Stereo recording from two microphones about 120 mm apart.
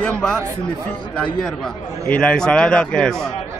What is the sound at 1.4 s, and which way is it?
A man's voice, 10° left (ahead or behind).